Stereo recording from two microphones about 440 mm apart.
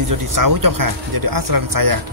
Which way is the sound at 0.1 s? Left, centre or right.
Right.